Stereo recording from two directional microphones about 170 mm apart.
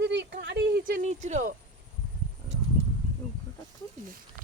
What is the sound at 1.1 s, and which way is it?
Speech, 45° right (ahead or behind).